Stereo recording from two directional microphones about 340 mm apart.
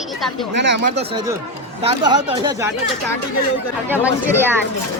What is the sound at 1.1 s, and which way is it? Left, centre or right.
Speech, centre.